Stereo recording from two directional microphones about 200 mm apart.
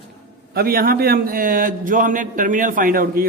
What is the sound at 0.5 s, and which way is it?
A man's voice, 50° right (ahead or behind).